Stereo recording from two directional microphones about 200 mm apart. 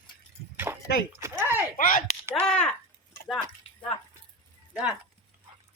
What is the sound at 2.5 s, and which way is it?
Speech, 5° left (ahead or behind).